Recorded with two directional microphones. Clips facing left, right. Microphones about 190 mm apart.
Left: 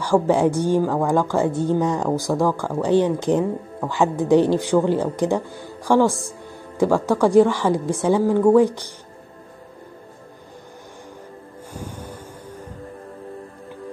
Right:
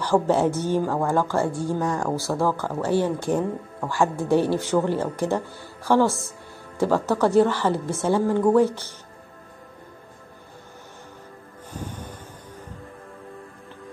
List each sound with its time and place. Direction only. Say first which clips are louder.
0.0 s speech: left 3 dB; 10° left (ahead or behind)
11.7 s music: left 1 dB; 10° left (ahead or behind)